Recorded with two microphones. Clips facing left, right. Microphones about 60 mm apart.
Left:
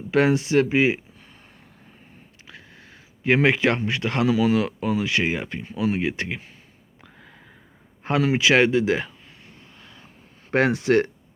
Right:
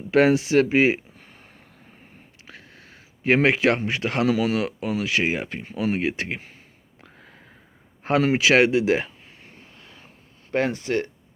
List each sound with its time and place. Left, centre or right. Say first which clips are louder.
0.1 s speech: right 2 dB; right
3.2 s speech: even; centre
7.0 s a sound: even; centre
8.2 s speech: even; centre
10.5 s speech: left 4 dB; left